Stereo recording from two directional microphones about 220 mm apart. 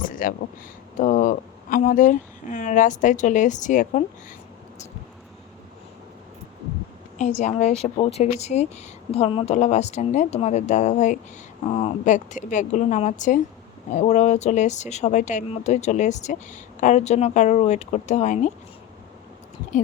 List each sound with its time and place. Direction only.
0.0 s a sound: 40° left (ahead or behind)
0.9 s speech: 35° left (ahead or behind)
7.2 s speech: 30° left (ahead or behind)